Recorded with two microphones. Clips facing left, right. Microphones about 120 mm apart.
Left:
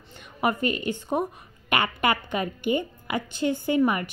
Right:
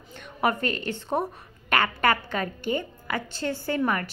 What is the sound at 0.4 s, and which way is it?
A woman's voice, 10° left (ahead or behind).